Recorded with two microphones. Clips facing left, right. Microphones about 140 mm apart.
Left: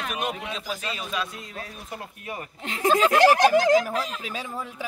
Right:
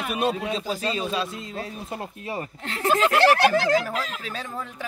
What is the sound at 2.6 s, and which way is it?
Speech, 15° left (ahead or behind).